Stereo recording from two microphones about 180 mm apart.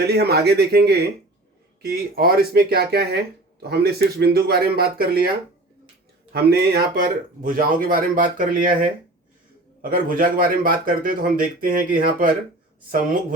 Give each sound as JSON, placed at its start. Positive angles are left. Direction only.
{"t": 0.1, "sound": "speech", "side_deg": -65}
{"t": 6.3, "sound": "speech", "side_deg": -60}
{"t": 9.9, "sound": "speech", "side_deg": -50}